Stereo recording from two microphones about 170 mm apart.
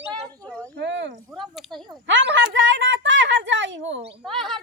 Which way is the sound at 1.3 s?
Centre (ahead or behind).